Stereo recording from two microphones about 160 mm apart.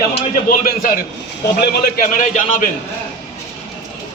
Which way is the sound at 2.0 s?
55° left (ahead or behind).